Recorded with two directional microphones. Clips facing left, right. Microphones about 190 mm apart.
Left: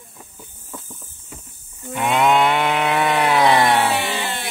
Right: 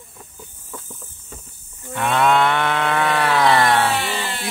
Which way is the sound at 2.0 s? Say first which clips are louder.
Left 1 dB; 15° left (ahead or behind).